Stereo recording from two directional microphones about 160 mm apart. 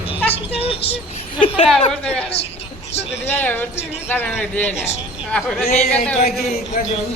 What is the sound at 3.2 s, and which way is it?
Speech, 15° left (ahead or behind).